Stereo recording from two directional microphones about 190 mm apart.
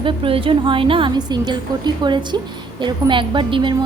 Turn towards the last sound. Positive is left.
turn(degrees=-25)  # may be behind; listen again after turning